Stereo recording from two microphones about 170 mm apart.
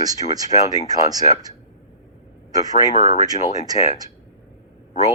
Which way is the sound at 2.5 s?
20° right (ahead or behind).